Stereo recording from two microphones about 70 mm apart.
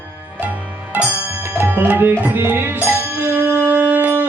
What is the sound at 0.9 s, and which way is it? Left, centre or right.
Music, right.